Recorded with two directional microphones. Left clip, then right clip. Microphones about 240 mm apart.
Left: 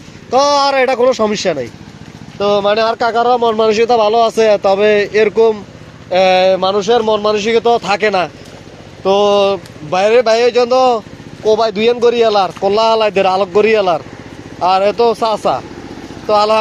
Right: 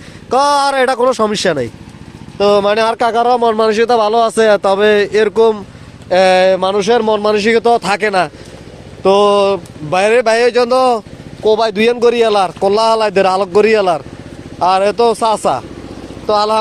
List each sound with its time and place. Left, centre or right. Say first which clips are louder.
0.3 s speech: even; right